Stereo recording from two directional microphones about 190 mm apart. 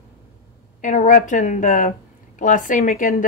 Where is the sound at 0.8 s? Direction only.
40° left (ahead or behind).